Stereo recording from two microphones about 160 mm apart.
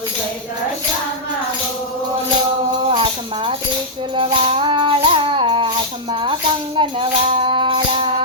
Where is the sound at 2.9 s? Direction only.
35° right (ahead or behind).